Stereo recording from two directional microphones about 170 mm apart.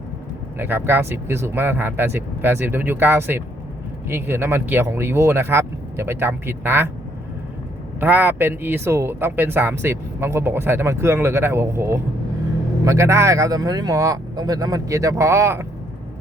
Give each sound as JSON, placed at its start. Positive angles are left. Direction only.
{"t": 0.5, "sound": "speech", "side_deg": -10}
{"t": 7.9, "sound": "speech", "side_deg": -10}